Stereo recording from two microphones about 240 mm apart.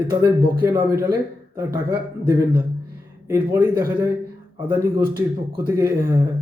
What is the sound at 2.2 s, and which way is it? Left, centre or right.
A man's voice, centre.